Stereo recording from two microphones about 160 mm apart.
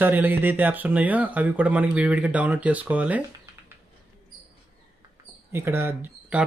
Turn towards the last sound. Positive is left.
turn(degrees=-15)  # may be behind; listen again after turning